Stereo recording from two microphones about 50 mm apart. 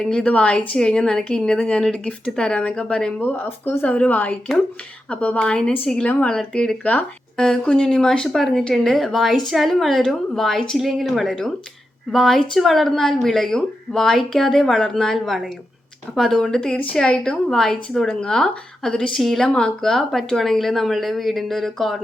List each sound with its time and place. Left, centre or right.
0.0 s speech: centre
3.2 s speech: left
5.4 s speech: centre
6.1 s speech: left
6.3 s speech: centre
10.8 s speech: centre
12.1 s speech: centre